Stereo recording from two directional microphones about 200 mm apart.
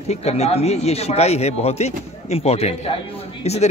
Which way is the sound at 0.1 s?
30° left (ahead or behind).